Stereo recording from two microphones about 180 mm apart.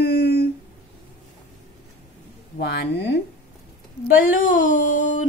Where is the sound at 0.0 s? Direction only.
60° left (ahead or behind).